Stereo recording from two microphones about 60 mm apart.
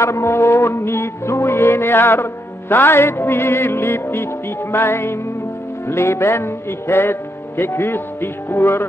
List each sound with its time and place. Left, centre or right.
0.0 s music: left
2.7 s speech: left